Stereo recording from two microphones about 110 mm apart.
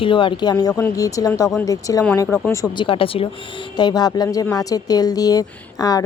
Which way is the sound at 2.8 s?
55° left (ahead or behind).